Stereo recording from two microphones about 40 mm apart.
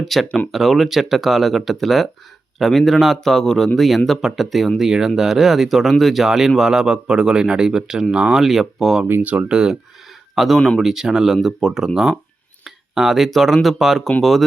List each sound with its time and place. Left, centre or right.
0.0 s speech: centre
3.2 s speech: centre
4.8 s speech: centre
9.2 s speech: right
9.5 s speech: right
10.3 s speech: centre